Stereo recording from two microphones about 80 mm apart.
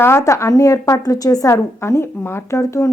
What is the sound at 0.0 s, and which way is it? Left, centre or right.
A woman's voice, left.